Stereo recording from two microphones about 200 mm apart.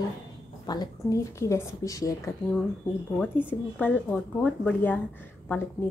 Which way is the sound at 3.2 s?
10° left (ahead or behind).